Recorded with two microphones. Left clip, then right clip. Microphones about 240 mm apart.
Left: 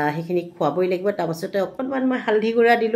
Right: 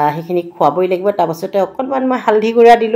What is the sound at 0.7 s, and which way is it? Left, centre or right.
Speech, right.